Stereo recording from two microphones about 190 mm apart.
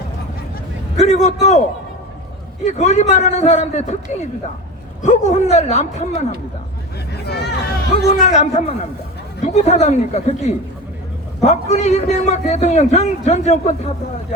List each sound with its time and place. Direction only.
0.9 s a man's voice: 35° left (ahead or behind)
2.6 s a man's voice: 35° left (ahead or behind)
5.0 s a man's voice: 35° left (ahead or behind)
7.1 s hubbub: 60° left (ahead or behind)
8.2 s a man's voice: 35° left (ahead or behind)